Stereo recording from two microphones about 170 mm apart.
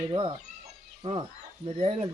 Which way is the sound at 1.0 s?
40° right (ahead or behind).